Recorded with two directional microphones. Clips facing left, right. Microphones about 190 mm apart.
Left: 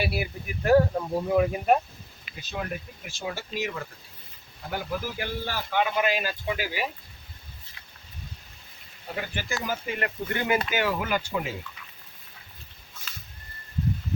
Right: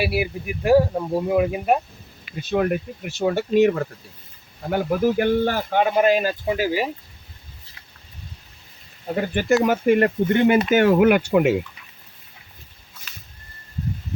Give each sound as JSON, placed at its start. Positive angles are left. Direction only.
{"t": 0.0, "sound": "speech", "side_deg": -10}
{"t": 2.3, "sound": "speech", "side_deg": -60}
{"t": 9.1, "sound": "speech", "side_deg": -45}
{"t": 10.2, "sound": "speech", "side_deg": -25}
{"t": 10.7, "sound": "speech", "side_deg": -50}